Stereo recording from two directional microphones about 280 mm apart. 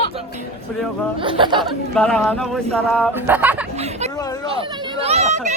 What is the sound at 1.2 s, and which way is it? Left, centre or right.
Speech, centre.